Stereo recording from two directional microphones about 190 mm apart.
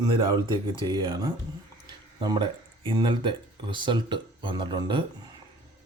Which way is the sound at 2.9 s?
25° right (ahead or behind).